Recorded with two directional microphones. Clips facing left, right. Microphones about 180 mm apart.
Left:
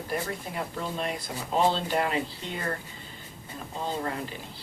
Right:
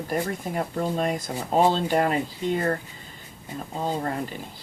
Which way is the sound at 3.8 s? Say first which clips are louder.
Right 4 dB; 45° right (ahead or behind).